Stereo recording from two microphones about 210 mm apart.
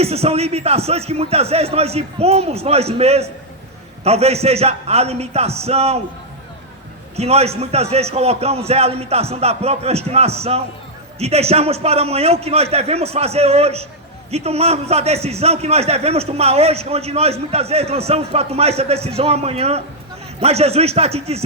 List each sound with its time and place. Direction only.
0.0 s a man's voice: 30° right (ahead or behind)
7.2 s a man's voice: 30° right (ahead or behind)